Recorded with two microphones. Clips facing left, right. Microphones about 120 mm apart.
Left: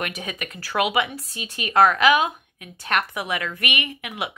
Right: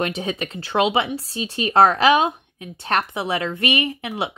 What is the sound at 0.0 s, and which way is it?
Speech, 30° right (ahead or behind).